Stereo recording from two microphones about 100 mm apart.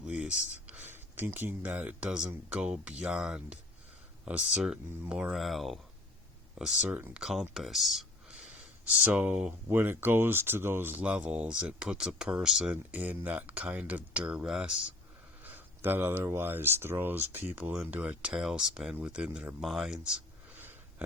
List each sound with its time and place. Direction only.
0.0 s speech: 10° right (ahead or behind)
6.8 s speech: 15° right (ahead or behind)
15.4 s speech: 20° right (ahead or behind)